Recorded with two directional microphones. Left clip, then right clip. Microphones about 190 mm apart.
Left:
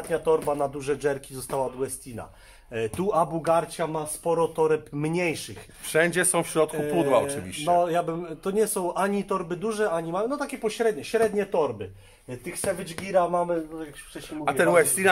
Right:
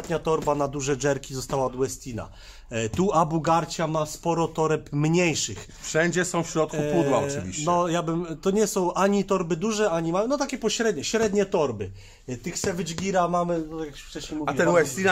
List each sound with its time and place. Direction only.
0.1 s a man's voice: 55° right (ahead or behind)
5.9 s speech: 5° left (ahead or behind)
7.7 s a man's voice: 45° right (ahead or behind)
14.4 s speech: 10° left (ahead or behind)